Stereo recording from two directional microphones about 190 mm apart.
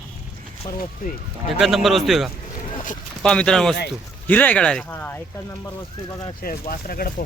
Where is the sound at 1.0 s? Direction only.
45° left (ahead or behind).